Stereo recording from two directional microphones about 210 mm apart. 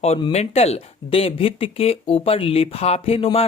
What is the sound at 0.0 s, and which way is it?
Speech, 30° left (ahead or behind).